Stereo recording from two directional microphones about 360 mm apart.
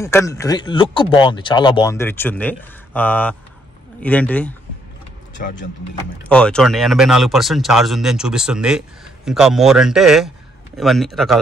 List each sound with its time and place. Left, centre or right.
0.0 s speech: centre
5.4 s speech: left
6.2 s speech: centre